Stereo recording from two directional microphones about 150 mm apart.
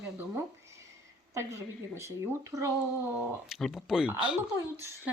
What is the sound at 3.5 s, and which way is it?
Speech, centre (ahead or behind).